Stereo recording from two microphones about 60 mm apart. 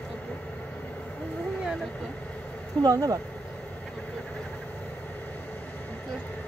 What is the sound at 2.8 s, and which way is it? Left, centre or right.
Speech, right.